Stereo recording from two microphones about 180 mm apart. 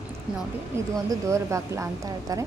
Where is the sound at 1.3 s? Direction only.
15° right (ahead or behind).